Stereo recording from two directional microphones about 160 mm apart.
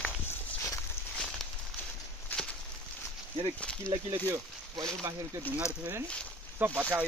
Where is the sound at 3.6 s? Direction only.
5° left (ahead or behind).